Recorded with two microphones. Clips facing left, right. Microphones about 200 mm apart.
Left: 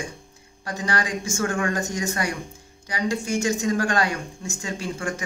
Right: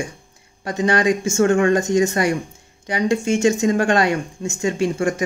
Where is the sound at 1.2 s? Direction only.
25° right (ahead or behind).